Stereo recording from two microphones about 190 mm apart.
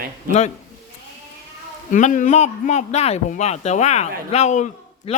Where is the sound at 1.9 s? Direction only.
40° left (ahead or behind).